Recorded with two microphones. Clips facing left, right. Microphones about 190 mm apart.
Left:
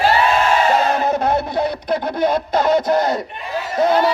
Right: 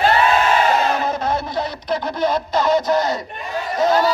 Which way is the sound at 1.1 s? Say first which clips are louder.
Left 4 dB; 60° left (ahead or behind).